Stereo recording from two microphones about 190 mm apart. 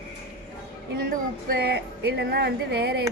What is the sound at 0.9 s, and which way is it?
Speech, 55° right (ahead or behind).